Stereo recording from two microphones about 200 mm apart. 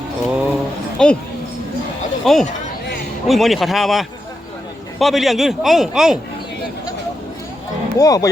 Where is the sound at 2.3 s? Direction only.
Centre (ahead or behind).